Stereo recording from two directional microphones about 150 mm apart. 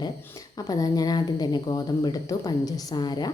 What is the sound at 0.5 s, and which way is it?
A woman's voice, 25° left (ahead or behind).